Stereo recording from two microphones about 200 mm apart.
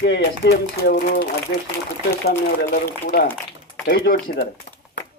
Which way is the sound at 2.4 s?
50° left (ahead or behind).